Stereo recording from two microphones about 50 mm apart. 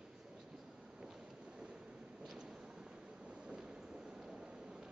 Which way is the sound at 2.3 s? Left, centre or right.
Centre.